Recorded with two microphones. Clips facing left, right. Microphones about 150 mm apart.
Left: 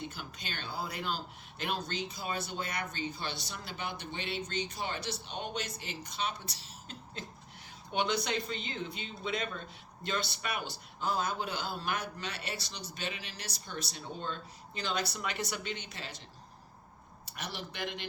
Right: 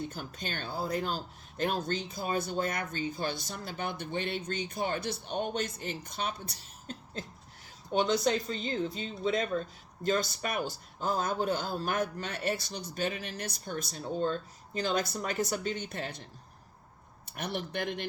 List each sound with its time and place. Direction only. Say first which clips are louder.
0.1 s speech: right 5 dB; 45° right (ahead or behind)
17.3 s speech: right 7 dB; 55° right (ahead or behind)